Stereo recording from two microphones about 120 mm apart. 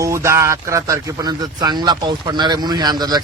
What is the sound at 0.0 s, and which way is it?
Speech, 25° right (ahead or behind).